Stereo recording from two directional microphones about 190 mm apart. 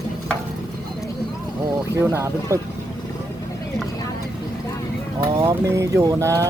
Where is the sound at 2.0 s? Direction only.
15° right (ahead or behind).